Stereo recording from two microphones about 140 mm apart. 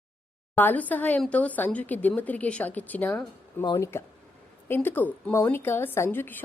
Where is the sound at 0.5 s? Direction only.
15° left (ahead or behind).